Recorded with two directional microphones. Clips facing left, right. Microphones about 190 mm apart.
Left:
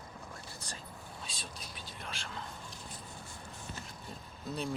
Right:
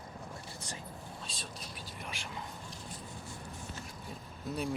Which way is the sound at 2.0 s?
15° right (ahead or behind).